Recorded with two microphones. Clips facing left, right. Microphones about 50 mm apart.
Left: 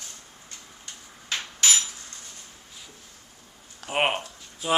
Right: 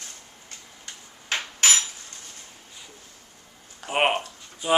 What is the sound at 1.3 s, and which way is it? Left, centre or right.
Cutlery, right.